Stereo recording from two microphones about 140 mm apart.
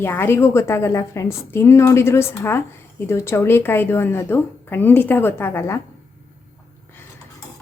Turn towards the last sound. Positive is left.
turn(degrees=15)  # may be behind; listen again after turning